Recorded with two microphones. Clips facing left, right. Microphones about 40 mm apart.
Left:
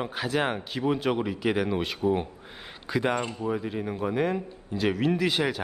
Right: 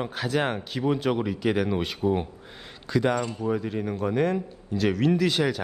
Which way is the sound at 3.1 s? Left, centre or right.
Left.